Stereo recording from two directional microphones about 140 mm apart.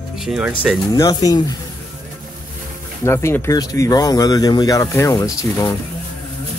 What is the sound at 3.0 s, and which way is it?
Speech, 15° left (ahead or behind).